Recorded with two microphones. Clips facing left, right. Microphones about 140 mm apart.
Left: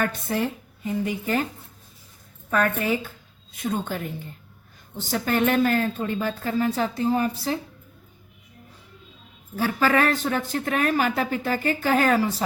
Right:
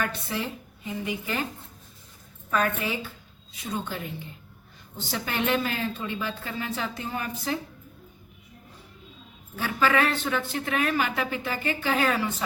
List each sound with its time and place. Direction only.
0.0 s a woman's voice: 45° left (ahead or behind)
2.5 s a woman's voice: 45° left (ahead or behind)
5.0 s a woman's voice: 45° left (ahead or behind)
9.6 s a woman's voice: 40° left (ahead or behind)